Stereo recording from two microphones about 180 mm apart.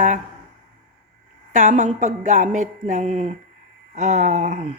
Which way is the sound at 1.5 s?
45° right (ahead or behind).